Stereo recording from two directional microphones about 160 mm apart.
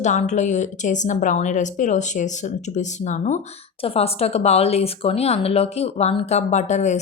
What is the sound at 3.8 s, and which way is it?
Speech, 40° left (ahead or behind).